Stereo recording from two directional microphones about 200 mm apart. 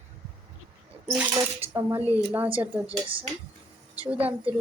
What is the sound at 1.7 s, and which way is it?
Speech, 10° right (ahead or behind).